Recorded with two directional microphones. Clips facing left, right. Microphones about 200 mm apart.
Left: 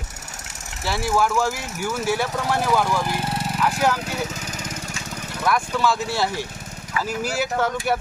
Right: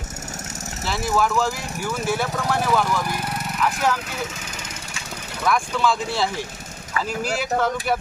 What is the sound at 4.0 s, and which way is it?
Lawn mower, 35° left (ahead or behind).